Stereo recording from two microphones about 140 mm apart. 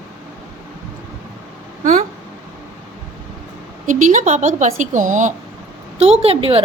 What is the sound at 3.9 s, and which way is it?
A woman's voice, 65° right (ahead or behind).